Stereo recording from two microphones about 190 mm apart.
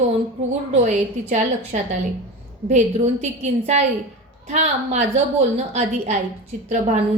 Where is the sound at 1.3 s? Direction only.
35° right (ahead or behind).